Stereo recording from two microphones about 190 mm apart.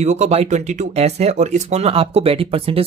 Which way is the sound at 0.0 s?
35° right (ahead or behind).